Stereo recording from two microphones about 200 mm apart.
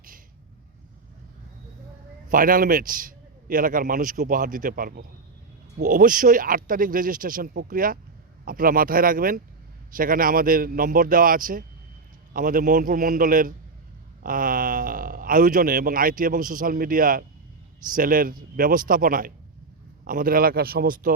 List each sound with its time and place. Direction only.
2.3 s speech: 45° right (ahead or behind)